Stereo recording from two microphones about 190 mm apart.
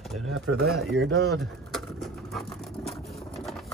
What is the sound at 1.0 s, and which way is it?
Speech, 60° right (ahead or behind).